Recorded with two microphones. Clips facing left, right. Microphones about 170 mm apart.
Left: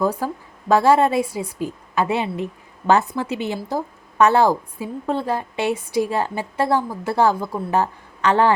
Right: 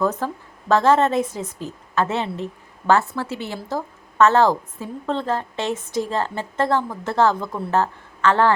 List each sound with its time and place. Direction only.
0.0 s a woman's voice: 10° left (ahead or behind)